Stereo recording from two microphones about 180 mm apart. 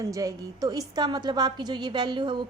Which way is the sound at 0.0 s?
20° right (ahead or behind).